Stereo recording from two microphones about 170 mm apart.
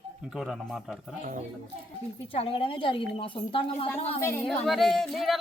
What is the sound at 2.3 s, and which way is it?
A woman's voice, 30° left (ahead or behind).